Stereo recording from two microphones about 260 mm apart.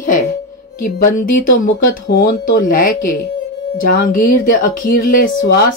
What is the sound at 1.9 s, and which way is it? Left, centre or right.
Speech, left.